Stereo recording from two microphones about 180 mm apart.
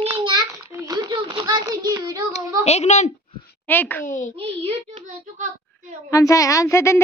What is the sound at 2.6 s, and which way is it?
Speech, 40° left (ahead or behind).